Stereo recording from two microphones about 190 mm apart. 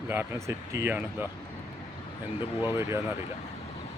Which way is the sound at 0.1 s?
15° right (ahead or behind).